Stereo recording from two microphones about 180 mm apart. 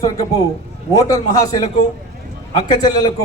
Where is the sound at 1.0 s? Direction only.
20° left (ahead or behind).